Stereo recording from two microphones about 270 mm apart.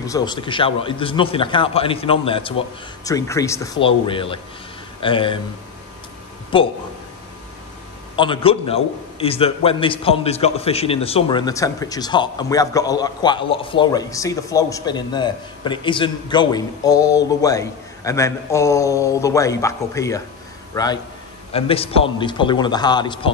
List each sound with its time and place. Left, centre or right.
0.0 s a man's voice: centre
6.5 s a man's voice: centre
8.2 s a man's voice: centre